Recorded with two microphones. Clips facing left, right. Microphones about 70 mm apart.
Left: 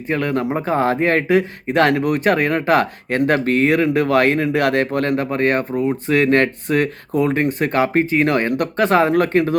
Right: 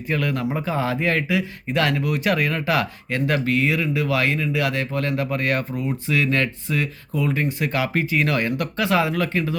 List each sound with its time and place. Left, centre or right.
0.1 s speech: left